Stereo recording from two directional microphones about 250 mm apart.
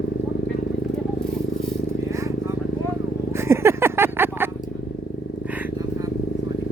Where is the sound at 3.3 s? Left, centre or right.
Centre.